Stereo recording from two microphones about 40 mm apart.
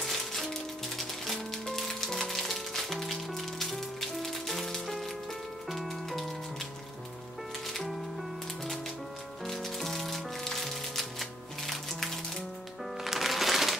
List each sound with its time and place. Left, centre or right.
0.0 s music: centre
7.6 s music: centre
13.0 s music: centre